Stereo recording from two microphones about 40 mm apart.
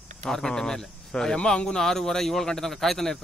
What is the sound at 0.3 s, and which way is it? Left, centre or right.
Speech, centre.